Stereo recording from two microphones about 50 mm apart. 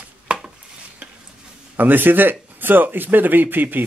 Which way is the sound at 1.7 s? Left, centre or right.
Right.